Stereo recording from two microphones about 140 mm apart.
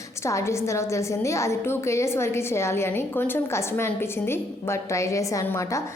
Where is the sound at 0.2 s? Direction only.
20° left (ahead or behind).